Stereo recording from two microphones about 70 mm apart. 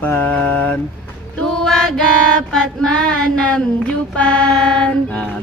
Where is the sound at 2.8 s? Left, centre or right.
Centre.